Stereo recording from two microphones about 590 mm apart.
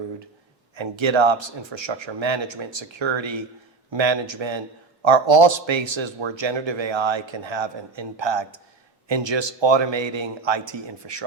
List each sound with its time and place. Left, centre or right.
0.8 s a man's voice: right